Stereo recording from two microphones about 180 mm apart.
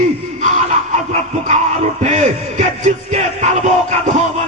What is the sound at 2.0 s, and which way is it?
Music, 40° right (ahead or behind).